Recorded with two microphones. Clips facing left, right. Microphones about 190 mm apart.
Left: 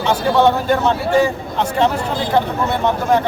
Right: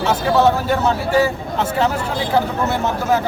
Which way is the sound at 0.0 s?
5° right (ahead or behind).